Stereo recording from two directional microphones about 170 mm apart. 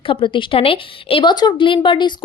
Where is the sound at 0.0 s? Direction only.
30° left (ahead or behind).